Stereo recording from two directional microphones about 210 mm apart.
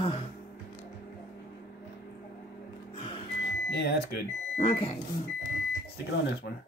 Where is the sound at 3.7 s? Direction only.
50° left (ahead or behind).